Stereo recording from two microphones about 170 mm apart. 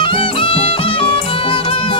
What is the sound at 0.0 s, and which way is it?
Music, 30° left (ahead or behind).